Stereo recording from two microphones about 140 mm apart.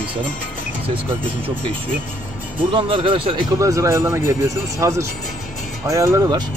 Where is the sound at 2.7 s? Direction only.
35° right (ahead or behind).